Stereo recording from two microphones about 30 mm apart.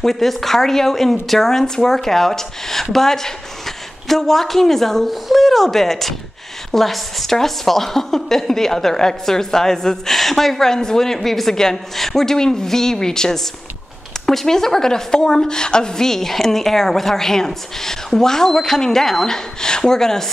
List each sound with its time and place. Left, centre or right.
0.0 s a woman's voice: centre
5.1 s a woman's voice: centre
10.1 s a woman's voice: centre
10.7 s speech: centre
11.1 s a woman's voice: centre